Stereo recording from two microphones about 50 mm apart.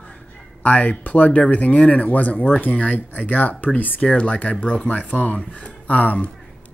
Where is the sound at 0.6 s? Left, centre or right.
Left.